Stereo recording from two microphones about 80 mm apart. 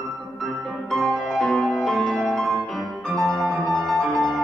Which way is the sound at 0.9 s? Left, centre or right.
Centre.